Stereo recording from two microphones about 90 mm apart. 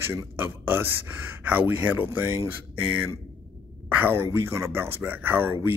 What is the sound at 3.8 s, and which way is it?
Speech, 25° right (ahead or behind).